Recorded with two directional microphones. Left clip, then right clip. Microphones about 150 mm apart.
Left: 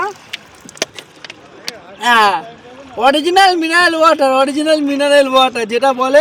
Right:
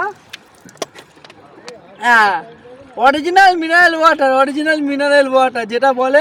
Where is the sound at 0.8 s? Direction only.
15° left (ahead or behind).